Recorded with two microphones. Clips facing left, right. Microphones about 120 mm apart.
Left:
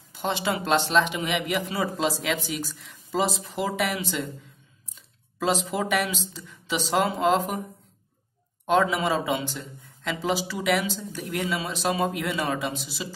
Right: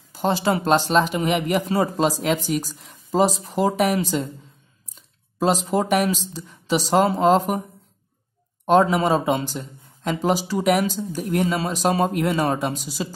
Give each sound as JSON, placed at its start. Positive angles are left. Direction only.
{"t": 0.1, "sound": "speech", "side_deg": -40}
{"t": 5.4, "sound": "speech", "side_deg": -40}
{"t": 8.6, "sound": "speech", "side_deg": -40}